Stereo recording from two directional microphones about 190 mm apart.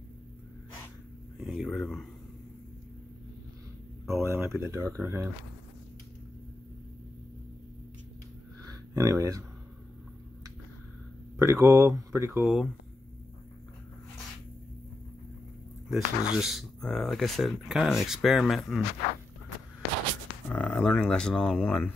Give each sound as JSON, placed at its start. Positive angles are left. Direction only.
{"t": 1.4, "sound": "speech", "side_deg": 0}
{"t": 4.1, "sound": "speech", "side_deg": -15}
{"t": 8.9, "sound": "speech", "side_deg": -15}
{"t": 11.3, "sound": "speech", "side_deg": -15}
{"t": 12.4, "sound": "speech", "side_deg": 0}
{"t": 15.9, "sound": "speech", "side_deg": 0}
{"t": 20.4, "sound": "speech", "side_deg": 5}